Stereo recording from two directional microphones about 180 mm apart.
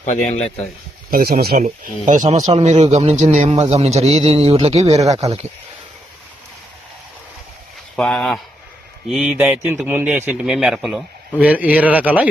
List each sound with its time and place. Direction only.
0.0 s speech: 45° left (ahead or behind)
1.1 s speech: 60° right (ahead or behind)
1.5 s speech: 45° right (ahead or behind)
4.9 s speech: 20° right (ahead or behind)
5.2 s speech: 35° right (ahead or behind)
7.9 s a man's voice: 5° left (ahead or behind)